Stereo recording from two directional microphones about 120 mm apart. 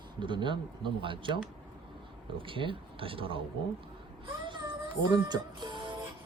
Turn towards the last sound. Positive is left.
turn(degrees=-40)  # may be behind; listen again after turning